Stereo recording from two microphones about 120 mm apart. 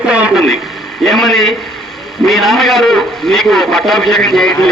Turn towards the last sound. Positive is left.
turn(degrees=5)  # may be behind; listen again after turning